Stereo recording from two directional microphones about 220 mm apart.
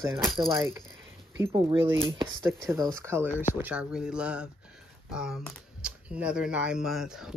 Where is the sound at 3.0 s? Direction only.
10° right (ahead or behind).